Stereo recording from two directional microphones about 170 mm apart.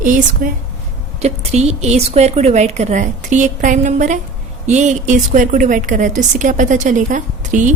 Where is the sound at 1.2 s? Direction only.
40° right (ahead or behind).